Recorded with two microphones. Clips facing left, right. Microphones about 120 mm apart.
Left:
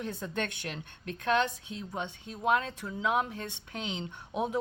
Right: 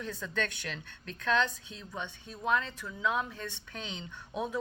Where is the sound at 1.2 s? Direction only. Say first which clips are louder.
Left 2 dB; 20° left (ahead or behind).